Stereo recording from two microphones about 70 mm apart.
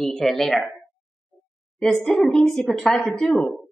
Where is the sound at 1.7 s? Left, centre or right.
Centre.